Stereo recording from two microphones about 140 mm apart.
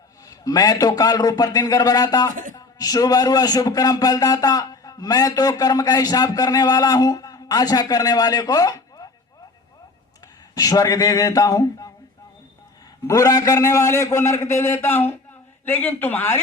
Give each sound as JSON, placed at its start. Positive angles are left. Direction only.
{"t": 0.3, "sound": "a man's voice", "side_deg": 25}
{"t": 2.3, "sound": "speech", "side_deg": -65}
{"t": 2.6, "sound": "a man's voice", "side_deg": 25}
{"t": 10.5, "sound": "a man's voice", "side_deg": 25}
{"t": 13.1, "sound": "a man's voice", "side_deg": 25}